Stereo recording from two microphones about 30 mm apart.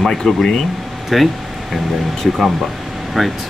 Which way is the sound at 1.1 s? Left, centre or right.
Centre.